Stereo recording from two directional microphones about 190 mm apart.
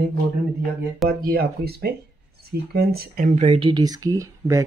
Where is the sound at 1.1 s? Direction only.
55° right (ahead or behind); by 4.6 s 15° right (ahead or behind).